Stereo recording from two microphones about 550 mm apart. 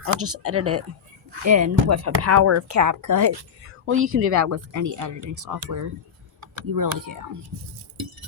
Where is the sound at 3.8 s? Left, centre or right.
Right.